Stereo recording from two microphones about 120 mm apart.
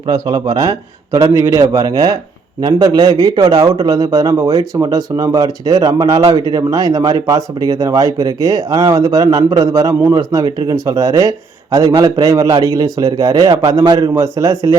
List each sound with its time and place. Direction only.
0.1 s speech: 30° right (ahead or behind)